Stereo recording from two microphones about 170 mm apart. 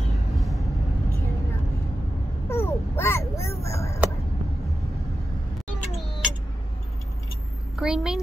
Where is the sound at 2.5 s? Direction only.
15° left (ahead or behind).